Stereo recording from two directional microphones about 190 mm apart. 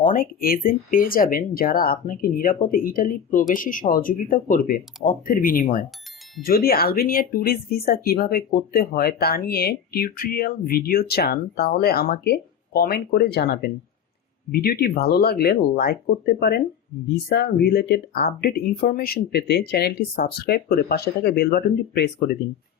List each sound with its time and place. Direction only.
0.0 s speech: 45° left (ahead or behind)